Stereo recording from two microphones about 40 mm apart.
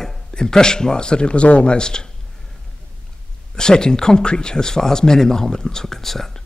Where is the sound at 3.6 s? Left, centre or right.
Centre.